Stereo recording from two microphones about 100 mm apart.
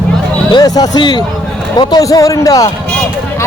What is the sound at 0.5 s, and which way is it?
A man's voice, 45° left (ahead or behind).